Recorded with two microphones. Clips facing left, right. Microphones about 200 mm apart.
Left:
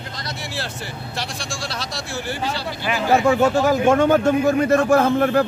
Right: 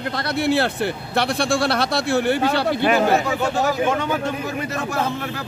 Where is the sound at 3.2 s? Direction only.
40° left (ahead or behind).